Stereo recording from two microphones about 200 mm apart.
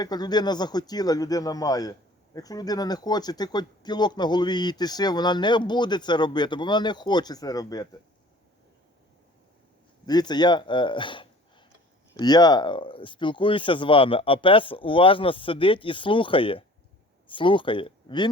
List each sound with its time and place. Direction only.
0.0 s speech: 20° left (ahead or behind)
10.1 s speech: 20° left (ahead or behind)